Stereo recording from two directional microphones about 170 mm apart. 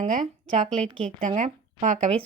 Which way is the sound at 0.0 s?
45° right (ahead or behind).